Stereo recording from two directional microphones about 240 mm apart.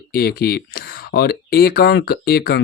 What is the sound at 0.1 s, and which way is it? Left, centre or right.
Speech, left.